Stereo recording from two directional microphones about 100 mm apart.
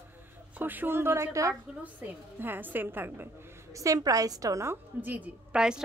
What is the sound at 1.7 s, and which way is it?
A woman's voice, 15° right (ahead or behind).